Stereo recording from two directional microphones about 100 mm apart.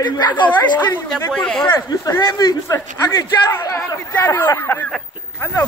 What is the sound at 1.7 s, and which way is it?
A man's voice, 30° left (ahead or behind).